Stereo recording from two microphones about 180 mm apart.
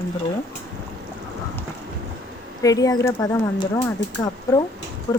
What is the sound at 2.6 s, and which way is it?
Speech, 20° left (ahead or behind).